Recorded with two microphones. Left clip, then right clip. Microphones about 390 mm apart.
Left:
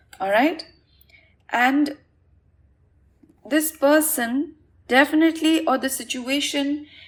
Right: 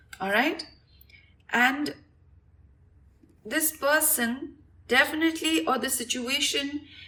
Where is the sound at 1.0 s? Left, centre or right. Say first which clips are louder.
Left 2 dB; left.